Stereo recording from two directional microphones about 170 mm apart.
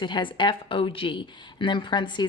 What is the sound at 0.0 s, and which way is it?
A woman's voice, 30° left (ahead or behind).